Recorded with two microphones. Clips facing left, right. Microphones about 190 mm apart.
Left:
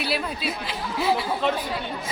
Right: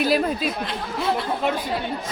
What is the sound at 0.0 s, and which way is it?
Speech, 45° right (ahead or behind).